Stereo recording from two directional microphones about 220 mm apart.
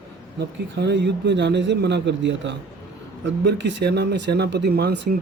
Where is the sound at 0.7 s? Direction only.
50° right (ahead or behind).